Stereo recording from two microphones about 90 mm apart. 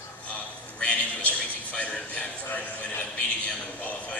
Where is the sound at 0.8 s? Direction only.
15° left (ahead or behind).